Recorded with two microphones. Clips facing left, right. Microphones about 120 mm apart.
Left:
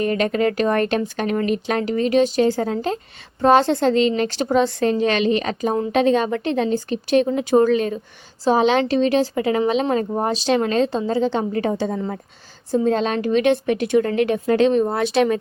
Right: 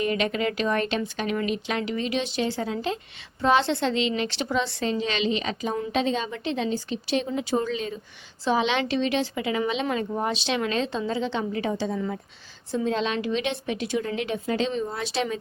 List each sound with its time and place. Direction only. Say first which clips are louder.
0.0 s speech: left 6 dB; 45° left (ahead or behind)
5.9 s a woman's voice: left 10 dB; 55° left (ahead or behind)
8.4 s a woman's voice: left 7 dB; 40° left (ahead or behind); by 15.4 s 60° left (ahead or behind)